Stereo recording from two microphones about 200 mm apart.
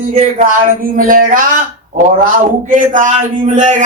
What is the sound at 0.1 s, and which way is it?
Speech, 30° right (ahead or behind).